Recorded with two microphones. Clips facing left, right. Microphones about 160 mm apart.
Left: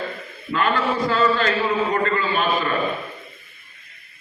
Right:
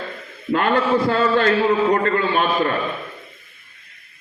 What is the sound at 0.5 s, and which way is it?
A man's voice, 60° right (ahead or behind).